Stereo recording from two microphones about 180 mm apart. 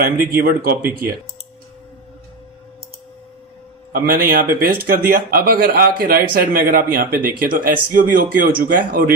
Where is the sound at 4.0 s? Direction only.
50° right (ahead or behind).